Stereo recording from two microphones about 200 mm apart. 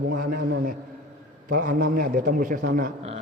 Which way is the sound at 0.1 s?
55° right (ahead or behind).